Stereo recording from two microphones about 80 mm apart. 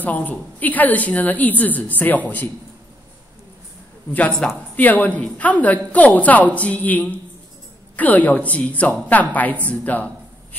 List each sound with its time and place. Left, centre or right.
0.0 s a woman's voice: left
4.4 s a woman's voice: centre
9.7 s a sound: centre